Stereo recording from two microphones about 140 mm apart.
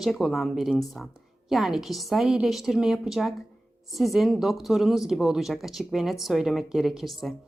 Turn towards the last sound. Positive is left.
turn(degrees=0)  # may be behind; listen again after turning